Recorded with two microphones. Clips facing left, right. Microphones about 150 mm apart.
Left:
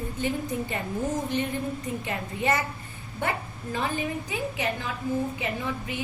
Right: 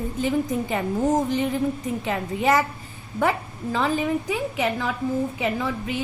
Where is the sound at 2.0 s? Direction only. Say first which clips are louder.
Right 7 dB; 90° right.